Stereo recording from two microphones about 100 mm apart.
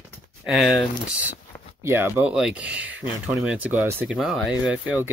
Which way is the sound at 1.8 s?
25° right (ahead or behind).